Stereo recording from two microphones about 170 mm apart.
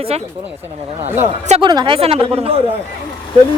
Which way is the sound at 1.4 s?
30° right (ahead or behind).